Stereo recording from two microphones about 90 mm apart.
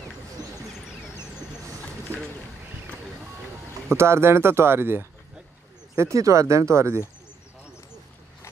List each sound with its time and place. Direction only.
3.9 s speech: 30° right (ahead or behind)